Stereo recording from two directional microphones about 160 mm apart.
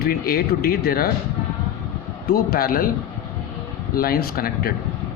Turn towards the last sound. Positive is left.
turn(degrees=70)  # may be behind; listen again after turning